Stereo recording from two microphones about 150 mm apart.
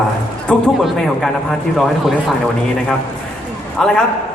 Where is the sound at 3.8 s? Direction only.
5° left (ahead or behind).